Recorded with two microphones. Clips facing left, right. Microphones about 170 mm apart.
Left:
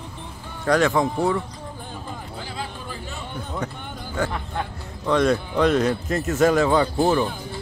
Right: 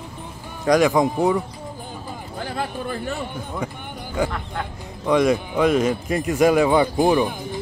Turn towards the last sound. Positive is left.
turn(degrees=-15)  # may be behind; listen again after turning